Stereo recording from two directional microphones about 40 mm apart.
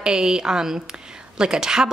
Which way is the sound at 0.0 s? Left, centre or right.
Centre.